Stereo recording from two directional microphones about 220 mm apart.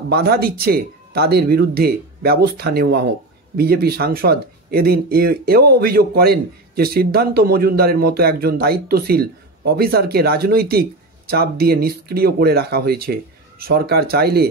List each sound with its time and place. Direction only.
0.1 s speech: 45° right (ahead or behind)